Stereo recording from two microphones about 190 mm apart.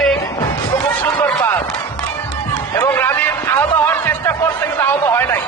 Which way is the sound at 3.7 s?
10° left (ahead or behind).